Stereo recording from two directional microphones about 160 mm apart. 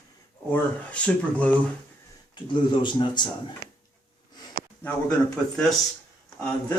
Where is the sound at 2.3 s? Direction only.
30° left (ahead or behind).